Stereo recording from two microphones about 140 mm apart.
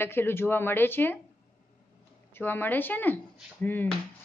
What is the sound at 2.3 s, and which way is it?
A woman's voice, 15° left (ahead or behind).